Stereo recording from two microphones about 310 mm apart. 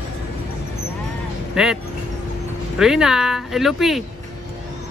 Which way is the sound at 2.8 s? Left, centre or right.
Centre.